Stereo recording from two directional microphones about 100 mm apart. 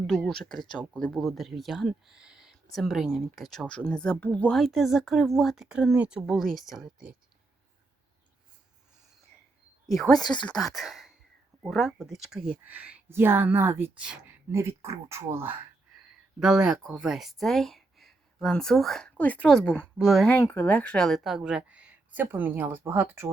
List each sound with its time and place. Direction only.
0.1 s speech: 5° left (ahead or behind)
4.5 s speech: centre (ahead or behind)
9.8 s a woman's voice: centre (ahead or behind); by 15.5 s 25° right (ahead or behind)
16.4 s speech: 5° right (ahead or behind)
20.5 s a woman's voice: 15° left (ahead or behind); by 23.3 s 25° right (ahead or behind)